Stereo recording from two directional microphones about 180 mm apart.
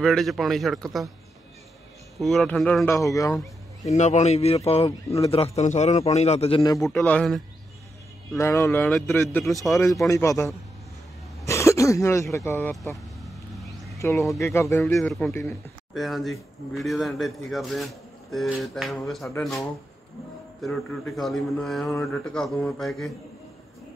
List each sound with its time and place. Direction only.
0.0 s a man's voice: centre (ahead or behind)
2.1 s speech: centre (ahead or behind); by 3.3 s 20° left (ahead or behind)
3.8 s a man's voice: 40° left (ahead or behind)
6.6 s a man's voice: 20° left (ahead or behind)
6.9 s a man's voice: 5° left (ahead or behind)
8.4 s speech: 15° left (ahead or behind)
9.4 s a man's voice: centre (ahead or behind)
10.0 s speech: 15° left (ahead or behind)
13.9 s speech: 15° left (ahead or behind)
15.0 s a man's voice: centre (ahead or behind)
20.6 s a man's voice: centre (ahead or behind)